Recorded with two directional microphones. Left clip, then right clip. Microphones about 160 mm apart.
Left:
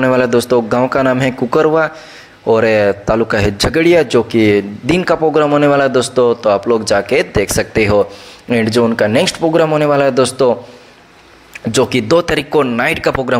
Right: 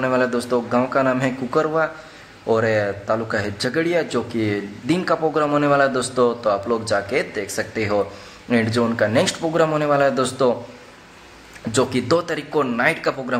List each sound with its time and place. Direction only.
0.0 s a man's voice: 40° left (ahead or behind)
11.7 s a man's voice: 35° left (ahead or behind)